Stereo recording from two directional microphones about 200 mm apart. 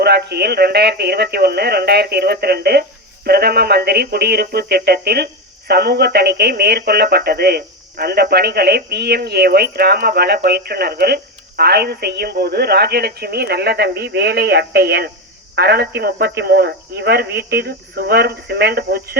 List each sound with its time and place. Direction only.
0.0 s speech: 55° right (ahead or behind)